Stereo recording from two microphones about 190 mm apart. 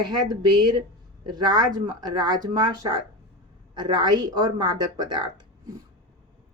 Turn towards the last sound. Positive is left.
turn(degrees=-20)  # may be behind; listen again after turning